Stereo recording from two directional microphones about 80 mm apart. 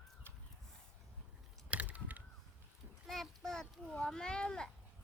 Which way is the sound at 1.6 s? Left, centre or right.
Centre.